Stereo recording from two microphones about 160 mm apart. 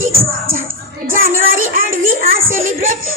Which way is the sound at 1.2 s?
65° right (ahead or behind).